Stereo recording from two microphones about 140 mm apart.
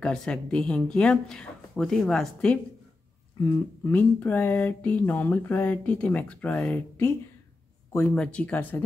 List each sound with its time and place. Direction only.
0.0 s speech: 5° left (ahead or behind)
3.4 s speech: 30° left (ahead or behind)
3.8 s speech: 15° left (ahead or behind)
8.1 s speech: 5° left (ahead or behind)